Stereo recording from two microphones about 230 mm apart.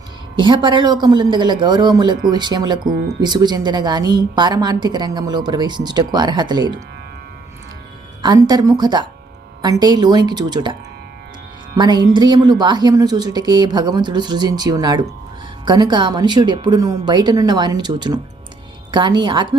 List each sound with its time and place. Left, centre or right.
0.3 s a woman's voice: right
8.2 s a woman's voice: centre
11.8 s a woman's voice: centre